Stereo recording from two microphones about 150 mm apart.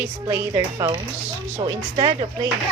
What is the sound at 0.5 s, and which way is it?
Speech, 30° right (ahead or behind).